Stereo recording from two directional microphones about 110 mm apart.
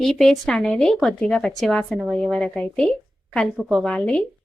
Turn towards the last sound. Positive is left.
turn(degrees=10)  # may be behind; listen again after turning